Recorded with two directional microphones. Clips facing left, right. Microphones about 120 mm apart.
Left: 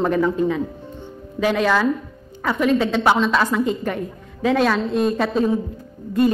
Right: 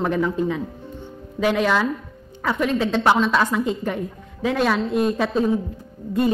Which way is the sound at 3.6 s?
15° right (ahead or behind).